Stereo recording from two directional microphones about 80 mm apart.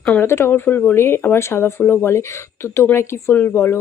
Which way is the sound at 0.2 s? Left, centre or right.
Left.